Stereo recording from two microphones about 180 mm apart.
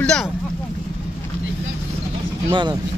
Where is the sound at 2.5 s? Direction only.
25° right (ahead or behind).